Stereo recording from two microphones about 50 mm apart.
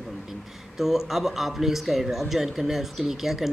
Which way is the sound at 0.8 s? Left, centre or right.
Centre.